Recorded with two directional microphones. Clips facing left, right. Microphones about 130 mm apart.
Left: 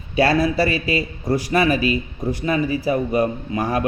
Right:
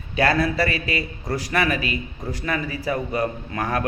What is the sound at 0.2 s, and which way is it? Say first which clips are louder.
Speech: left 3 dB; 25° left (ahead or behind).